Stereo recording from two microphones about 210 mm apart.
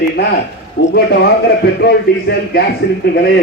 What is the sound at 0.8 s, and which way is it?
Speech, 55° left (ahead or behind).